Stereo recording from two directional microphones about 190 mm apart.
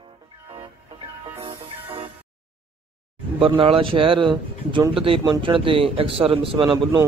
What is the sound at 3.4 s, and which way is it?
Speech, 30° right (ahead or behind).